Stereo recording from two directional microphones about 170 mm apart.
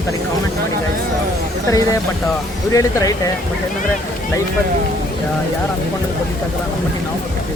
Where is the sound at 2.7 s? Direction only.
20° left (ahead or behind).